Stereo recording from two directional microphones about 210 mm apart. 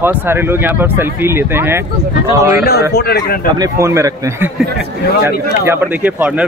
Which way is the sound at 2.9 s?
50° left (ahead or behind).